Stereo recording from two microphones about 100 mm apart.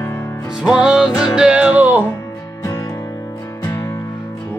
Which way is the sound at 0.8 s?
5° right (ahead or behind).